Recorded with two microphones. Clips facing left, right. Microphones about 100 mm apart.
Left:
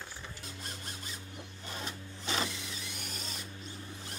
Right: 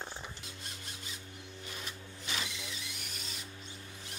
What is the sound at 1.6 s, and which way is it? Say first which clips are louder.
Sewing machine: left 5 dB; 35° left (ahead or behind).